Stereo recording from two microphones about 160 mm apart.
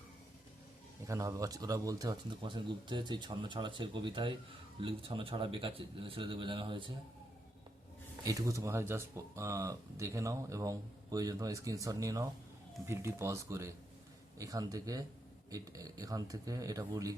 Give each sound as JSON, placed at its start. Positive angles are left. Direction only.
{"t": 1.0, "sound": "a man's voice", "side_deg": -20}
{"t": 8.2, "sound": "speech", "side_deg": -20}